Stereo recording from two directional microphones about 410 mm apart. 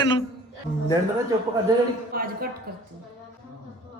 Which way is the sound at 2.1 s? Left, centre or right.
Right.